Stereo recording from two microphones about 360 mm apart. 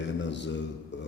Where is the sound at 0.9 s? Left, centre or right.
Left.